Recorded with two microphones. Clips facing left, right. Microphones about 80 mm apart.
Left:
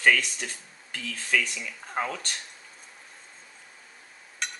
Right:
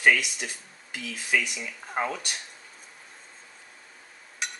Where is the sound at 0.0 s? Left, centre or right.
Centre.